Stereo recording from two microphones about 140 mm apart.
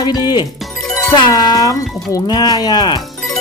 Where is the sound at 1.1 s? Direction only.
30° left (ahead or behind).